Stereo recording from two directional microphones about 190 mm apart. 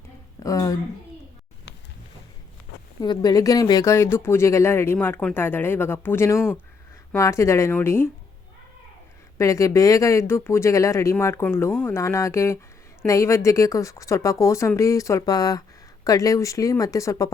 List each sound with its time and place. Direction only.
0.4 s speech: 15° left (ahead or behind)
3.0 s speech: 20° left (ahead or behind)
9.4 s speech: 15° left (ahead or behind)